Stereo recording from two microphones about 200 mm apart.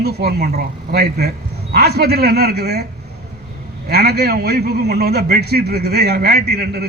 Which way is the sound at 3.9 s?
50° right (ahead or behind).